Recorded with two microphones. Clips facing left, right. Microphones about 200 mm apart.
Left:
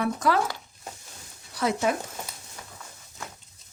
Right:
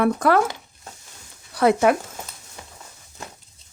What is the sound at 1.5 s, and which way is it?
Speech, 65° right (ahead or behind).